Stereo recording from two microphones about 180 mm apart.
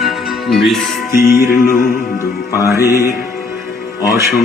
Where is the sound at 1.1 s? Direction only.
15° right (ahead or behind).